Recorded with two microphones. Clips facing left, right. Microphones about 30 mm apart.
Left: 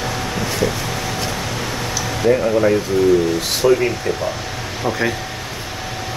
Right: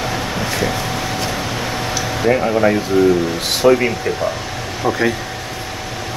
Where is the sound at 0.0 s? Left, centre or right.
Centre.